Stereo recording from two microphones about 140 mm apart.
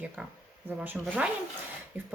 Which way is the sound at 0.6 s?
10° right (ahead or behind).